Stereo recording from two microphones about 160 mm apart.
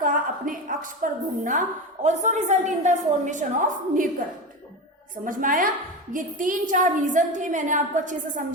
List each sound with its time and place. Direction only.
0.0 s a woman's voice: 55° right (ahead or behind)